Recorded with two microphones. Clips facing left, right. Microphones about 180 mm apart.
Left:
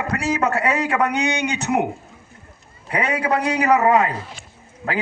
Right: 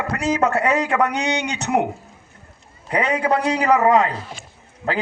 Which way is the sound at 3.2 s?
30° right (ahead or behind).